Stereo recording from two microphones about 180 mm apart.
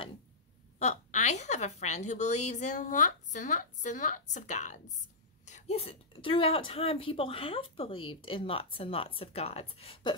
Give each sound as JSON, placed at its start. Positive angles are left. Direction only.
{"t": 0.7, "sound": "a woman's voice", "side_deg": 40}